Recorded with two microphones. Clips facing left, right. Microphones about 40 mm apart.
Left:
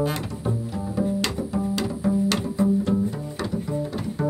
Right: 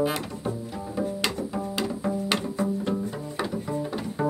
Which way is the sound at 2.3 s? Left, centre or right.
Centre.